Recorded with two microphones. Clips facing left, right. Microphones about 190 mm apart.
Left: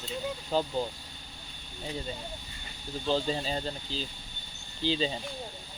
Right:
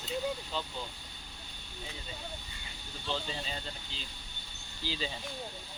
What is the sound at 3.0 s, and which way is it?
Speech, 35° left (ahead or behind).